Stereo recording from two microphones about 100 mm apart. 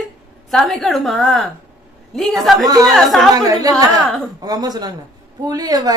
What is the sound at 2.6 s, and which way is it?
Speech, 40° right (ahead or behind).